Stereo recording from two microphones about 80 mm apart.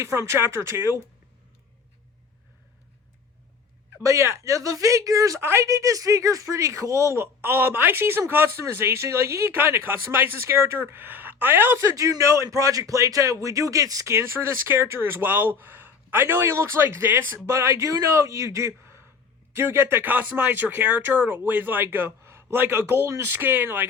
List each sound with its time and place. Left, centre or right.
0.0 s speech: right
4.0 s speech: right
11.9 s speech: right